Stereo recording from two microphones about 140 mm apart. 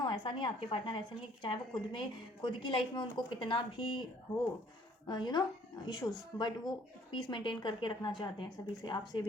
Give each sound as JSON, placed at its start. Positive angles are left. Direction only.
{"t": 0.0, "sound": "a woman's voice", "side_deg": 35}
{"t": 5.0, "sound": "a woman's voice", "side_deg": 30}